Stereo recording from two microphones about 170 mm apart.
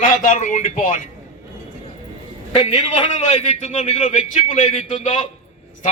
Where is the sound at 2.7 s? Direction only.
40° left (ahead or behind).